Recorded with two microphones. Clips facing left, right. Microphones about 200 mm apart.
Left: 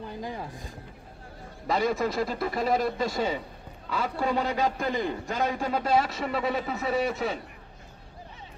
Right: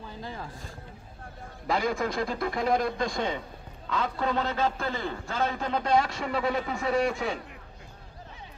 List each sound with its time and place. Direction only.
0.2 s speech: 15° left (ahead or behind)
1.7 s a man's voice: centre (ahead or behind)